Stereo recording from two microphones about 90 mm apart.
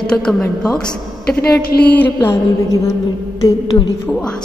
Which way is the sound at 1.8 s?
20° left (ahead or behind).